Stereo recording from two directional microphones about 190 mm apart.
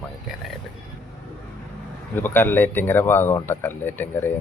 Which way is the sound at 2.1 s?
10° left (ahead or behind).